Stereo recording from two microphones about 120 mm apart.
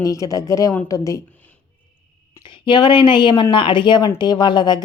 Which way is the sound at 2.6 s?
40° left (ahead or behind).